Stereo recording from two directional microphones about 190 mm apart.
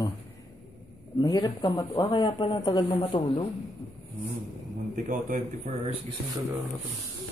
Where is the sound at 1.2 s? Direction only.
20° left (ahead or behind).